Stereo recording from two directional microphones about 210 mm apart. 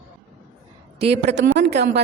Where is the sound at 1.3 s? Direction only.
55° right (ahead or behind).